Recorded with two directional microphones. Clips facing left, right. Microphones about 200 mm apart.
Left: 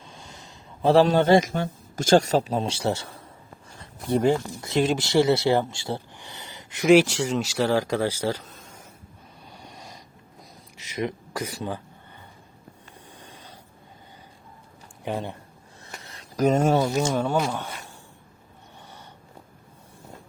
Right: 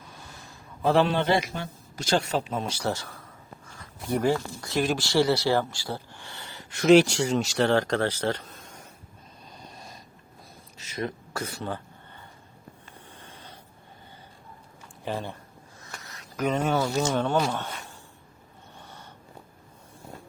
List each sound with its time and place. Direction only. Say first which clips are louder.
0.0 s speech: left 1 dB; 20° left (ahead or behind); by 8.8 s 5° left (ahead or behind)
9.7 s sniff: left 1 dB; 20° left (ahead or behind)
10.8 s speech: left 3 dB; 15° left (ahead or behind)
13.1 s a sound: left 2 dB; 15° left (ahead or behind)
15.0 s speech: left 2 dB; 15° left (ahead or behind)
15.9 s a sound: left 2 dB; 30° left (ahead or behind)
16.5 s speech: left 5 dB; 45° left (ahead or behind)
16.7 s speech: left 3 dB; 15° left (ahead or behind)